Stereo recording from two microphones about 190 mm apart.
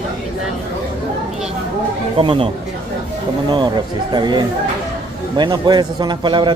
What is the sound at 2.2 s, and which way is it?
Speech, 25° right (ahead or behind).